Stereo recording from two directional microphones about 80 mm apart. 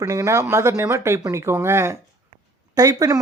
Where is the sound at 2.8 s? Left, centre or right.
Right.